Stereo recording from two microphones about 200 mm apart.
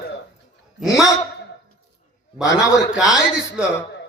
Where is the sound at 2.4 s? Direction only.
15° left (ahead or behind).